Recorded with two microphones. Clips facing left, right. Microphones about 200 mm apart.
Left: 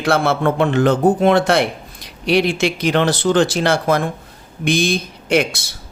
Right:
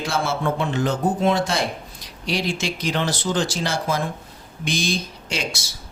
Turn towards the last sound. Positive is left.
turn(degrees=60)  # may be behind; listen again after turning